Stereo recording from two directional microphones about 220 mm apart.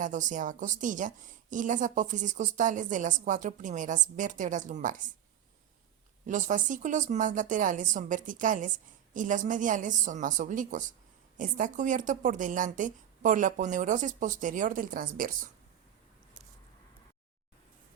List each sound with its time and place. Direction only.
0.0 s a woman's voice: 35° right (ahead or behind)
6.2 s a woman's voice: 35° right (ahead or behind)